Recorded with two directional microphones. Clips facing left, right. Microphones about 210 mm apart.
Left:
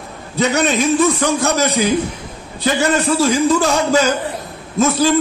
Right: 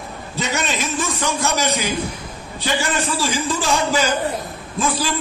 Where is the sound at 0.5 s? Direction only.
60° left (ahead or behind).